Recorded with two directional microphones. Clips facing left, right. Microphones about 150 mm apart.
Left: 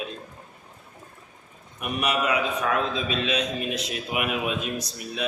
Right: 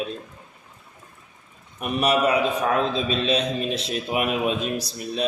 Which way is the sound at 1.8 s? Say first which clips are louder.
Right 5 dB; 35° right (ahead or behind).